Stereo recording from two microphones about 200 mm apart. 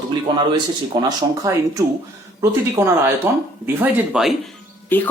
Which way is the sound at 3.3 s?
15° right (ahead or behind).